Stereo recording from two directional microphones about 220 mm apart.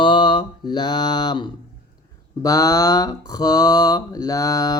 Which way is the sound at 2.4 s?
15° left (ahead or behind).